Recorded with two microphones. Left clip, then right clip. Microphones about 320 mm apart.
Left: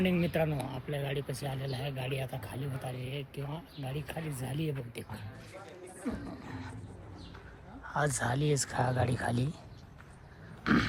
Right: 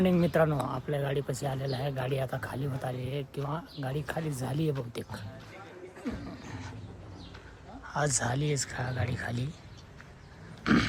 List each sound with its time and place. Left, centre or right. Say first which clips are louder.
0.0 s speech: right 5 dB; centre
6.1 s speech: even; centre
7.9 s speech: right 1 dB; centre
10.6 s a sound: right 2 dB; centre